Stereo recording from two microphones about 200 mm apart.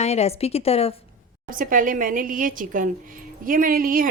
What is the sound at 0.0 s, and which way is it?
Speech, 30° left (ahead or behind).